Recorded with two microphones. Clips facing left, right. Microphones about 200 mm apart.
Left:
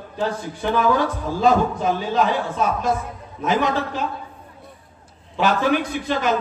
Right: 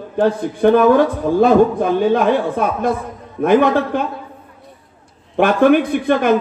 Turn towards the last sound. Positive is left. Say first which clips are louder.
# right 8 dB
turn(degrees=-55)  # may be behind; listen again after turning